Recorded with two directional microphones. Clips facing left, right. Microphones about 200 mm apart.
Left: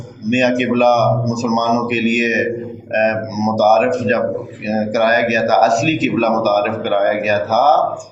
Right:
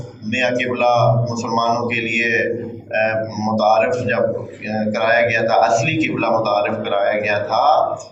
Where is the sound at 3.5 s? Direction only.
35° left (ahead or behind).